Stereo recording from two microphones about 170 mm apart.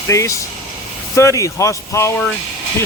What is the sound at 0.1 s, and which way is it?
Speech, 20° left (ahead or behind).